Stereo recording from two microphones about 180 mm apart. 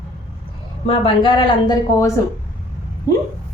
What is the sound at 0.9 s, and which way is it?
Speech, 30° left (ahead or behind).